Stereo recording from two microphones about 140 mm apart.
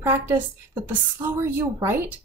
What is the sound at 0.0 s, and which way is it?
A woman's voice, 15° right (ahead or behind).